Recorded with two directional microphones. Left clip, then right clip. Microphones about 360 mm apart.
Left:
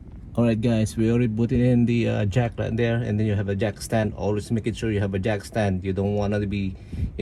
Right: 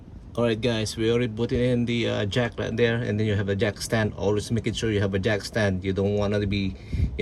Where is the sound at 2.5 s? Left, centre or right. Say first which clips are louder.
Right 1 dB; centre.